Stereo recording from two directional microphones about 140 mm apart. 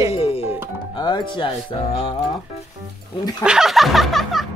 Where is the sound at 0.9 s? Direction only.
35° left (ahead or behind).